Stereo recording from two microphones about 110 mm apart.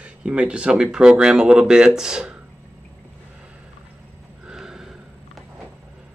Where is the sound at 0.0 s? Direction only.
10° right (ahead or behind).